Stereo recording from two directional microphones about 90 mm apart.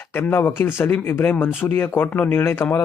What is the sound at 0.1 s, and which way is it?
Speech, 25° left (ahead or behind).